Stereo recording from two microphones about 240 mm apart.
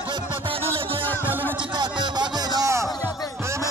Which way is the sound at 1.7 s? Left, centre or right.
Centre.